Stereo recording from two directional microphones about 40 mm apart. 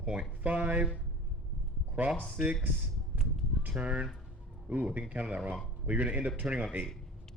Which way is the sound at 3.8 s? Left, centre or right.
Right.